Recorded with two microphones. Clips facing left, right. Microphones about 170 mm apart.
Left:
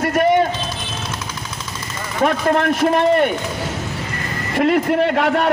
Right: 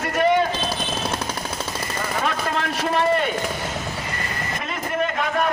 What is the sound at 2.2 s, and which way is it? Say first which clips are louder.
Speech: left 11 dB; 55° left (ahead or behind).